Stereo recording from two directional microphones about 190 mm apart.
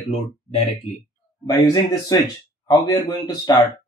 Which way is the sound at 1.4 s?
20° left (ahead or behind).